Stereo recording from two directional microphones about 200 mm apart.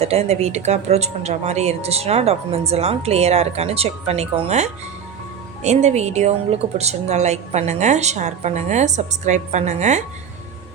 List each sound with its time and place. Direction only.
0.0 s speech: 30° right (ahead or behind)